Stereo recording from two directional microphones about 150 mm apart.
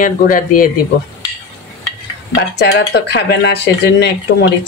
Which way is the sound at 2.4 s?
90° left.